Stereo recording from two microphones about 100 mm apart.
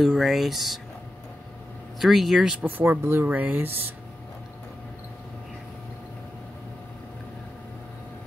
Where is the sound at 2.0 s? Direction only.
Centre (ahead or behind).